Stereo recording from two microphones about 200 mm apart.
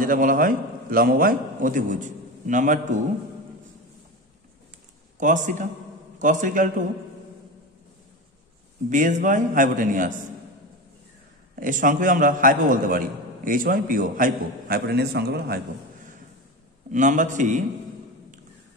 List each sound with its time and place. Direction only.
0.0 s a man's voice: 45° right (ahead or behind)
5.2 s a man's voice: 40° right (ahead or behind)
8.9 s a man's voice: 40° right (ahead or behind)
11.6 s a man's voice: 40° right (ahead or behind)
16.9 s a man's voice: 40° right (ahead or behind)